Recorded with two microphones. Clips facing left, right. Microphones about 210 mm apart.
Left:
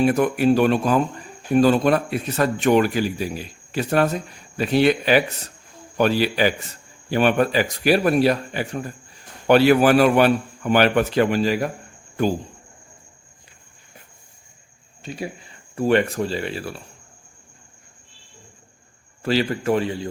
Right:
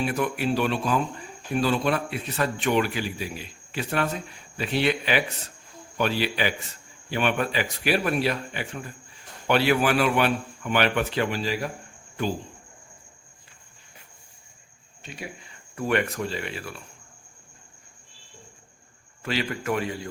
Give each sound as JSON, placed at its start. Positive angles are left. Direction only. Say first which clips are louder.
{"t": 0.0, "sound": "a man's voice", "louder": "left 8 dB", "side_deg": 45}
{"t": 15.0, "sound": "speech", "louder": "left 8 dB", "side_deg": 35}
{"t": 19.2, "sound": "speech", "louder": "left 7 dB", "side_deg": 35}